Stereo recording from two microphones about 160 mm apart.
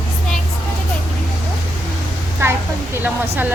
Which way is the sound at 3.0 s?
10° right (ahead or behind).